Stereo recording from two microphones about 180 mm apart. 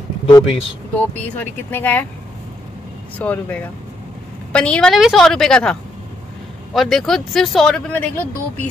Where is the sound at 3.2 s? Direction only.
10° left (ahead or behind).